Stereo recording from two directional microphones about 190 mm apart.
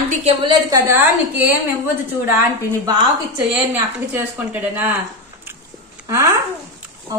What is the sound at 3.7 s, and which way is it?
A woman's voice, 10° right (ahead or behind).